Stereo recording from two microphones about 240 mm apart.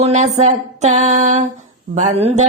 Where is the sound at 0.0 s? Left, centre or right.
Right.